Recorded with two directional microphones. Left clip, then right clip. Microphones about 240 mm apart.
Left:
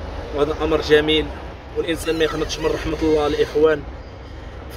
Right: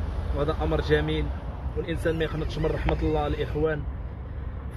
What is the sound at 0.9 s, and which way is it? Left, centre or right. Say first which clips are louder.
Speech: left 12 dB; left.